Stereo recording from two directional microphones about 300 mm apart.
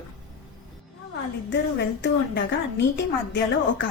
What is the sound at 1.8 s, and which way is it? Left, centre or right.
A woman's voice, left.